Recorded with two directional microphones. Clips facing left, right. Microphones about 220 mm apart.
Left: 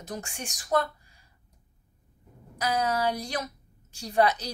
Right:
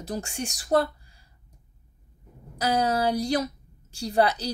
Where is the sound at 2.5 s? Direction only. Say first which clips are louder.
Right 3 dB; 35° right (ahead or behind).